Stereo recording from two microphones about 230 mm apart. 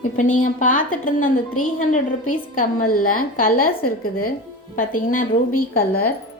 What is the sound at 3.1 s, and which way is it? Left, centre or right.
Speech, left.